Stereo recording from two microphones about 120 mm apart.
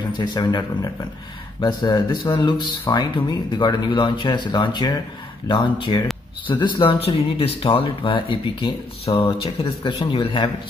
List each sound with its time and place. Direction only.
0.2 s speech: 35° left (ahead or behind); by 9.3 s 55° left (ahead or behind)
9.8 s speech: 45° left (ahead or behind)